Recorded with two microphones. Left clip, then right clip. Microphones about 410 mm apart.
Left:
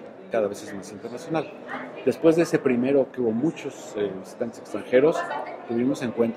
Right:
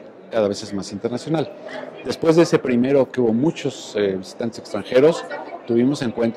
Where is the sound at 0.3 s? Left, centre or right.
Right.